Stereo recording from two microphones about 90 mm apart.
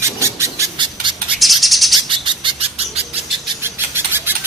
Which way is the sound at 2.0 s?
65° right (ahead or behind).